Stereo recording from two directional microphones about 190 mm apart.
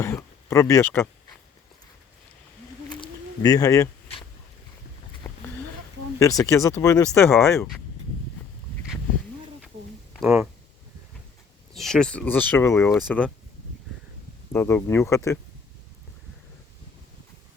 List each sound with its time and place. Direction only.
0.0 s speech: 15° left (ahead or behind)
3.0 s bird: 20° left (ahead or behind)
5.2 s a sound: 15° left (ahead or behind)
6.1 s speech: 15° left (ahead or behind)
11.7 s speech: centre (ahead or behind)
14.5 s speech: 15° left (ahead or behind)